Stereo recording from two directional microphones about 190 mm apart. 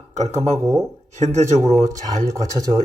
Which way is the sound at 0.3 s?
35° right (ahead or behind).